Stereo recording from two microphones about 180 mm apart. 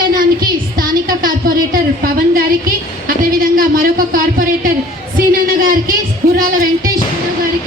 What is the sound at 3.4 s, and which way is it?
A woman's voice, 50° right (ahead or behind).